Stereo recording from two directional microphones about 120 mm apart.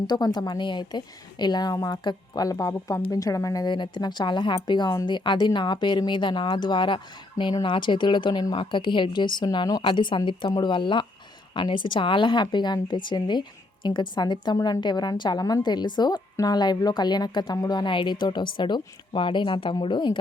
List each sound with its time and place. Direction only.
0.1 s a woman's voice: 35° left (ahead or behind)